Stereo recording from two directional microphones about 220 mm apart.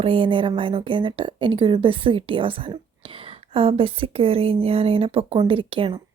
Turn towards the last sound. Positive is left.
turn(degrees=-25)  # may be behind; listen again after turning